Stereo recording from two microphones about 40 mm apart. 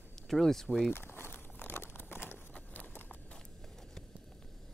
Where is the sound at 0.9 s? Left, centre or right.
Left.